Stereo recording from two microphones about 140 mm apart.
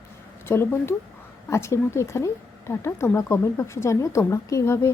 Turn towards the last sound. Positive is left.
turn(degrees=20)  # may be behind; listen again after turning